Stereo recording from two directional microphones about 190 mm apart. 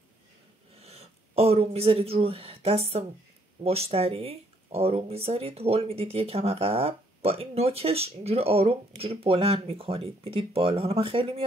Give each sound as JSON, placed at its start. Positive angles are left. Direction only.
{"t": 0.7, "sound": "speech", "side_deg": -35}